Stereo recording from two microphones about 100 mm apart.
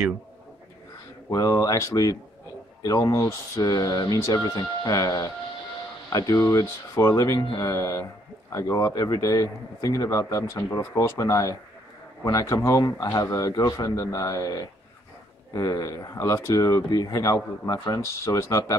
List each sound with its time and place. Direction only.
1.3 s a man's voice: 35° left (ahead or behind)